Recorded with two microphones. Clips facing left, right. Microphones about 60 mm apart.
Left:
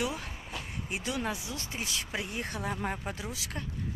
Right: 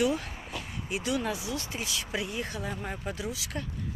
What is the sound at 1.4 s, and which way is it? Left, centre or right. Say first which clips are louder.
Speech: right 5 dB; right.